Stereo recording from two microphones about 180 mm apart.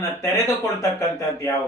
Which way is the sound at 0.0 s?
15° left (ahead or behind).